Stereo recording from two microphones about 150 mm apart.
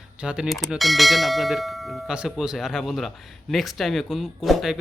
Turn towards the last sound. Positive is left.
turn(degrees=0)  # may be behind; listen again after turning